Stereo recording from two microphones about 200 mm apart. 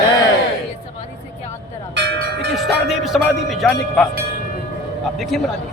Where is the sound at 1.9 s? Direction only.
60° right (ahead or behind).